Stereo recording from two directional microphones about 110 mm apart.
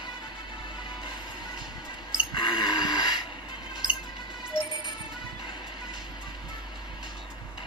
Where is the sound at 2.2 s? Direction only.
45° left (ahead or behind).